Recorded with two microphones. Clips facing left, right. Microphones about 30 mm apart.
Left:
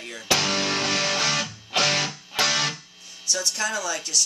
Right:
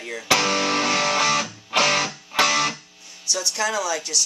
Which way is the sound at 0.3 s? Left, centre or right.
Right.